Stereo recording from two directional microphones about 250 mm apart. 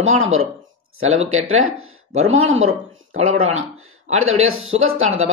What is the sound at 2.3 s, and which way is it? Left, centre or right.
Speech, right.